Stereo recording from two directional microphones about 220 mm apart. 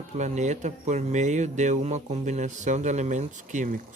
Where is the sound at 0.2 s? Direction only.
30° right (ahead or behind).